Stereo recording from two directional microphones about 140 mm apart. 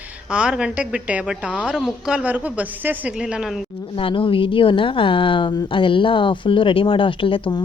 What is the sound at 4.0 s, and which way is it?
A woman's voice, 40° left (ahead or behind).